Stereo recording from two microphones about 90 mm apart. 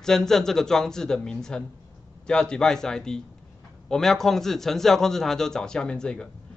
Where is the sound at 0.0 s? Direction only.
5° left (ahead or behind).